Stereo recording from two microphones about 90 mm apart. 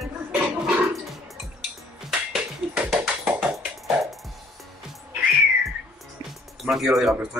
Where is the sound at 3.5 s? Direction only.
Centre (ahead or behind).